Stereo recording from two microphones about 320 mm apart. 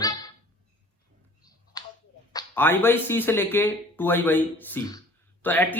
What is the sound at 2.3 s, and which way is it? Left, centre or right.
Speech, centre.